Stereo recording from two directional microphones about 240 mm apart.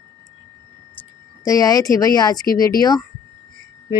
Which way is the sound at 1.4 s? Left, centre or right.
Centre.